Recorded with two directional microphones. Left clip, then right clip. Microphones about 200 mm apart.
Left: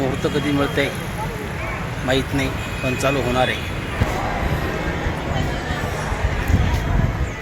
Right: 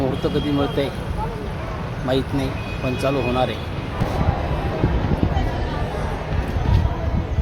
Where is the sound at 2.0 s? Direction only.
5° right (ahead or behind).